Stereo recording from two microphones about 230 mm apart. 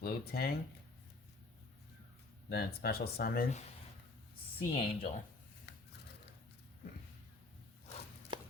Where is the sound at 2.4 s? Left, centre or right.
Left.